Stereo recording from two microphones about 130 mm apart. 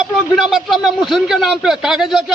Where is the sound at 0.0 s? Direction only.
Centre (ahead or behind).